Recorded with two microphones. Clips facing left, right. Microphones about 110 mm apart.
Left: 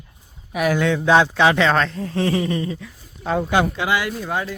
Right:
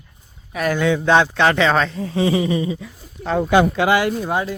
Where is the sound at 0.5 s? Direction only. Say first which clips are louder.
Even; 5° left (ahead or behind); by 2.9 s 10° right (ahead or behind).